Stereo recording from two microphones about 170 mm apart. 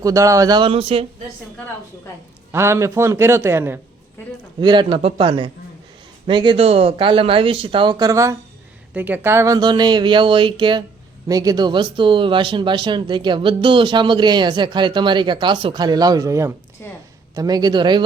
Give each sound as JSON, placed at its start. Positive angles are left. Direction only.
{"t": 0.0, "sound": "speech", "side_deg": -20}
{"t": 2.5, "sound": "a man's voice", "side_deg": -15}
{"t": 4.6, "sound": "speech", "side_deg": -25}
{"t": 16.8, "sound": "a woman's voice", "side_deg": 15}
{"t": 17.3, "sound": "speech", "side_deg": -25}